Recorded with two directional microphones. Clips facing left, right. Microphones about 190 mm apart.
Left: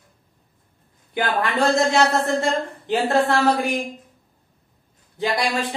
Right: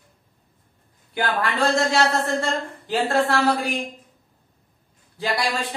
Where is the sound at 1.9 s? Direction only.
20° left (ahead or behind).